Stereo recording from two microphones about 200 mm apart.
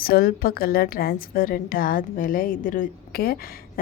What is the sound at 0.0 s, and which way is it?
A woman's voice, 50° left (ahead or behind).